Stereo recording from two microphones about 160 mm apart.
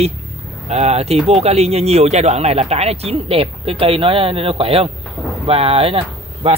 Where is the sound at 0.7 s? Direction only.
45° right (ahead or behind).